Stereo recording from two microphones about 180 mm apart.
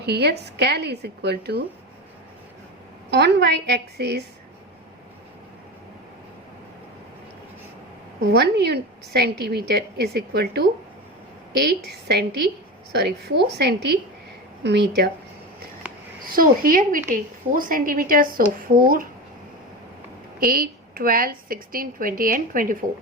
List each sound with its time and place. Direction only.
0.0 s a woman's voice: 65° right (ahead or behind)
3.1 s a woman's voice: 65° right (ahead or behind)
8.3 s a woman's voice: 65° right (ahead or behind)
16.2 s a woman's voice: 50° right (ahead or behind)
20.4 s a woman's voice: 55° right (ahead or behind)